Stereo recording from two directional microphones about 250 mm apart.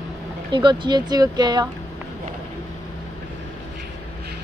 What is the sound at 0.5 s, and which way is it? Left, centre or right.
Speech, centre.